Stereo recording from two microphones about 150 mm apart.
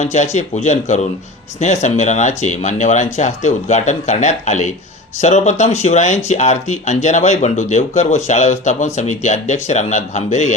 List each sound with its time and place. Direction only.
0.0 s speech: 50° left (ahead or behind)